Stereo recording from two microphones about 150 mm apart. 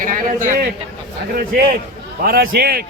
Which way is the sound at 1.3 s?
80° right.